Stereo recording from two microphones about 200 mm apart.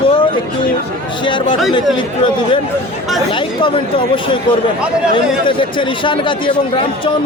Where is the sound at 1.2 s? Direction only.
25° left (ahead or behind).